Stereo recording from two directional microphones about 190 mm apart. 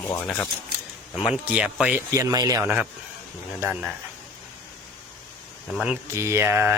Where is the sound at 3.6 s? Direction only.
5° right (ahead or behind).